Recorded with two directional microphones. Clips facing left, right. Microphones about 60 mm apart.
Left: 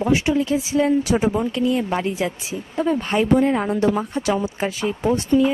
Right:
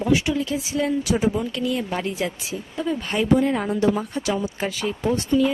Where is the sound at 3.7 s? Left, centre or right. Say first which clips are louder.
Left 2 dB; left.